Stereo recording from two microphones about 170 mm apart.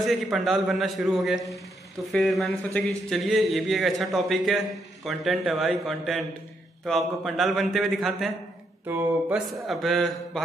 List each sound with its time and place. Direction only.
0.0 s speech: centre (ahead or behind)
8.8 s a sound: 10° right (ahead or behind)
9.7 s speech: centre (ahead or behind)